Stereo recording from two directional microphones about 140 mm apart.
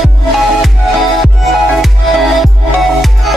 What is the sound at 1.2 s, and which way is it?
Music, centre (ahead or behind).